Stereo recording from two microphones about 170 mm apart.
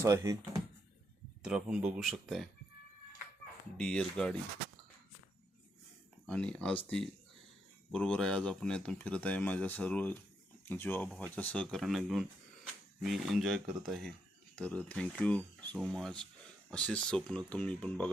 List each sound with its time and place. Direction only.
0.0 s speech: 15° right (ahead or behind)
1.4 s speech: 5° right (ahead or behind)
3.8 s speech: 5° left (ahead or behind)
6.2 s speech: 5° left (ahead or behind)
7.9 s speech: 5° left (ahead or behind)